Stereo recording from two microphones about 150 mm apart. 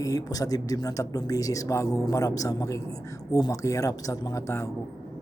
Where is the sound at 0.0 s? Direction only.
25° left (ahead or behind).